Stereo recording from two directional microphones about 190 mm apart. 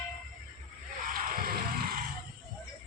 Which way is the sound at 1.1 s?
45° right (ahead or behind).